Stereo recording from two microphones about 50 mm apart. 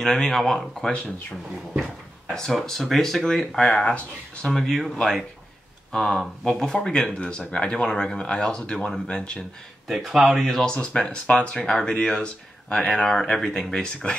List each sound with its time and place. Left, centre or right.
0.0 s speech: centre
2.3 s speech: centre
4.5 s speech: centre
6.4 s speech: centre
9.8 s speech: centre
10.6 s speech: centre